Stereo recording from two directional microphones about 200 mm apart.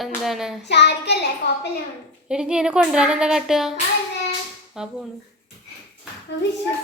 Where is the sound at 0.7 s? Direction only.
60° left (ahead or behind).